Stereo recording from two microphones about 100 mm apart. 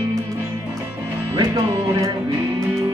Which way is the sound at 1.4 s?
35° right (ahead or behind).